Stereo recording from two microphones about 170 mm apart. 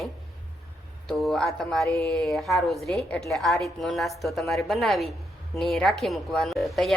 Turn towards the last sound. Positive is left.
turn(degrees=0)  # may be behind; listen again after turning